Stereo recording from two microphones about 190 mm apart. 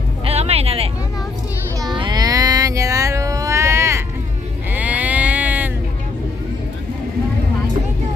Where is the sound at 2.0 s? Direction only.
20° right (ahead or behind).